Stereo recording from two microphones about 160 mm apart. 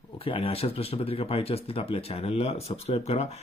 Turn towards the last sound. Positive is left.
turn(degrees=40)  # may be behind; listen again after turning